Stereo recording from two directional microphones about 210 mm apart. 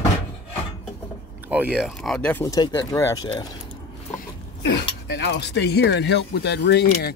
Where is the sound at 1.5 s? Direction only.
5° right (ahead or behind); by 3.5 s 15° left (ahead or behind).